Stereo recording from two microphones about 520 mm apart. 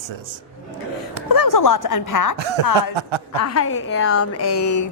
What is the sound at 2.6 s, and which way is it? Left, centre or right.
Speech, right.